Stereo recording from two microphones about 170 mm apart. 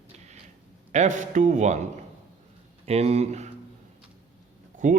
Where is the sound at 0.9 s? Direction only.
45° right (ahead or behind).